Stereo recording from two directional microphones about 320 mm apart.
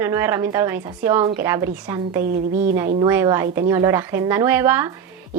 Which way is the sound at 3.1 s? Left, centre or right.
Centre.